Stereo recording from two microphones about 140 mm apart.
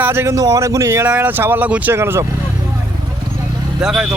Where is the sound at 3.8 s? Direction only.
5° right (ahead or behind).